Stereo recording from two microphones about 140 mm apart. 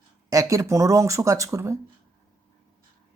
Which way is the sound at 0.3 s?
25° right (ahead or behind).